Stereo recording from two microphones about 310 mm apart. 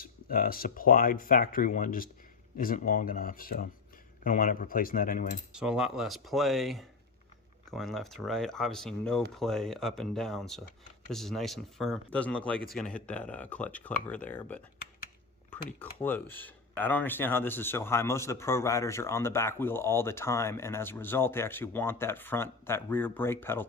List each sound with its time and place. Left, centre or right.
0.0 s speech: left
5.5 s speech: centre